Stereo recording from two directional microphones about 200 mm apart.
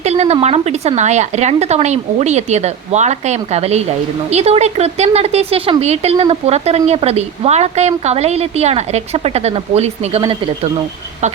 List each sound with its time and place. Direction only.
0.0 s speech: 35° right (ahead or behind)